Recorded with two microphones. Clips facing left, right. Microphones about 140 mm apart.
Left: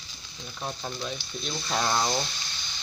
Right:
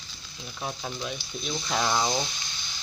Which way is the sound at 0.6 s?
5° right (ahead or behind).